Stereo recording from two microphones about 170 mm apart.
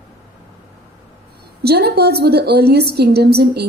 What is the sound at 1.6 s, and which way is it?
A woman's voice, 70° right (ahead or behind).